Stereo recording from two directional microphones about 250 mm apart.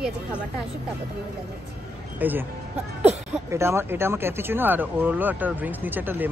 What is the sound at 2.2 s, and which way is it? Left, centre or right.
Speech, centre.